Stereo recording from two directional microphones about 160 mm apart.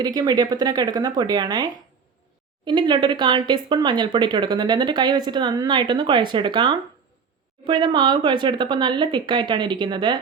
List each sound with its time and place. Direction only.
0.0 s speech: 25° right (ahead or behind)